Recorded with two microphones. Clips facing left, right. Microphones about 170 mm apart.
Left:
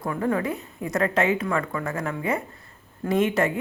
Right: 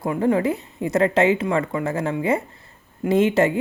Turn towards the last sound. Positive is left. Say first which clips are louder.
# right 4 dB
turn(degrees=-25)  # may be behind; listen again after turning